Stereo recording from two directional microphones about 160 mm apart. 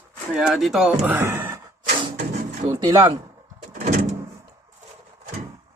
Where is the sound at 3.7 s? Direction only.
45° right (ahead or behind).